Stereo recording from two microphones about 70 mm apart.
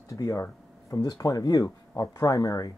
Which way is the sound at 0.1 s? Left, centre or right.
Left.